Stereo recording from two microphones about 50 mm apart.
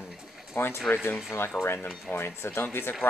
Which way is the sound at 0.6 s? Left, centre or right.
Left.